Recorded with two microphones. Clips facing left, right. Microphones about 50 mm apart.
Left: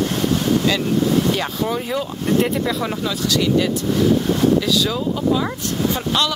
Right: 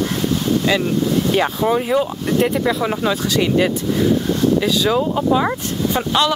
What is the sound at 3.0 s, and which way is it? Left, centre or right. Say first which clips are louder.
Speech: right 2 dB; right.